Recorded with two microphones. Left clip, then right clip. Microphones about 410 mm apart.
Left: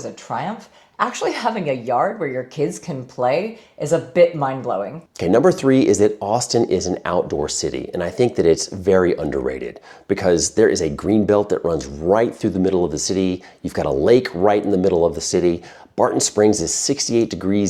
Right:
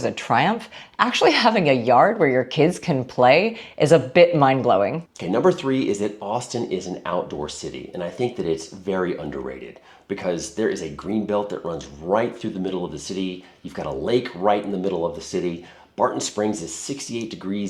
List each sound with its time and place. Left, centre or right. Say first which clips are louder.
0.0 s speech: right 6 dB; right
5.2 s speech: left 5 dB; left
10.1 s speech: left 9 dB; left